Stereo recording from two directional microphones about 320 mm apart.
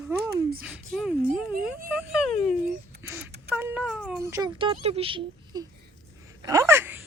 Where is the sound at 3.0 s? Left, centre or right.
Centre.